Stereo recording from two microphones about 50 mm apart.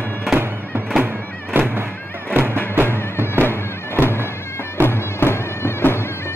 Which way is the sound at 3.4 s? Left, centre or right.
Left.